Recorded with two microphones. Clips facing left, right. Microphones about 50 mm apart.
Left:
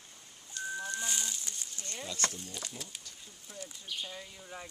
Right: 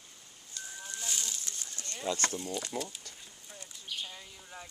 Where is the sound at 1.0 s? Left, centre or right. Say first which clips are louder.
Left 2 dB; centre.